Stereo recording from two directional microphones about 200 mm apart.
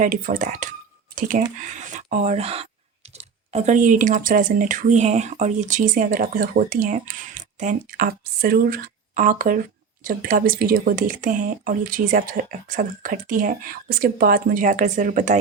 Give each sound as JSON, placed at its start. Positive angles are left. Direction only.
{"t": 0.0, "sound": "speech", "side_deg": -45}